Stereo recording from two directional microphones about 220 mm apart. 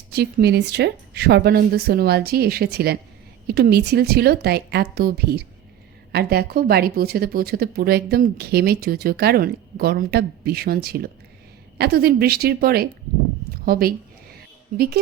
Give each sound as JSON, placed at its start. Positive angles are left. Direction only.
{"t": 0.1, "sound": "a woman's voice", "side_deg": -45}